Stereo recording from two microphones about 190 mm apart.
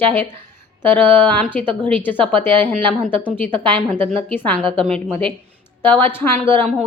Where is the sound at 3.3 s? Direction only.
10° left (ahead or behind).